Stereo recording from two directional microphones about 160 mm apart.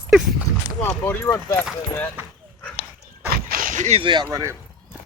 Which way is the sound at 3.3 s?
65° right (ahead or behind).